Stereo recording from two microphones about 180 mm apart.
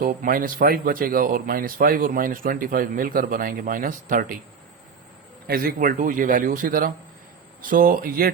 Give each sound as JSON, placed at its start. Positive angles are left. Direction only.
{"t": 0.0, "sound": "speech", "side_deg": -50}
{"t": 5.5, "sound": "speech", "side_deg": -55}